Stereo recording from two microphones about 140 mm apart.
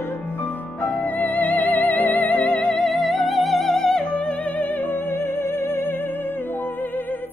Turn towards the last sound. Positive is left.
turn(degrees=15)  # may be behind; listen again after turning